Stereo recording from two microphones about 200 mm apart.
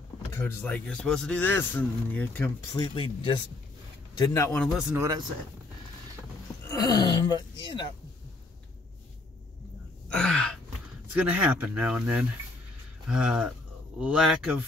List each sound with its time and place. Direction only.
0.3 s a man's voice: 10° left (ahead or behind)
2.7 s speech: 25° left (ahead or behind)
4.2 s a man's voice: 15° left (ahead or behind)
4.6 s speech: centre (ahead or behind)
6.7 s speech: 20° left (ahead or behind)
10.0 s gasp: 5° left (ahead or behind)
11.1 s speech: 5° right (ahead or behind)